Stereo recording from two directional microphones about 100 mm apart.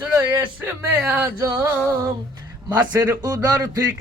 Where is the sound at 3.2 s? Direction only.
35° right (ahead or behind).